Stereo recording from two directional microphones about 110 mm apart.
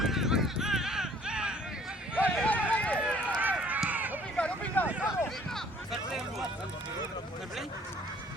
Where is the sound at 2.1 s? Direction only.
15° left (ahead or behind).